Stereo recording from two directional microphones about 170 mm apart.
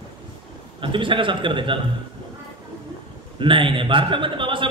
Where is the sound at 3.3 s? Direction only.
30° right (ahead or behind).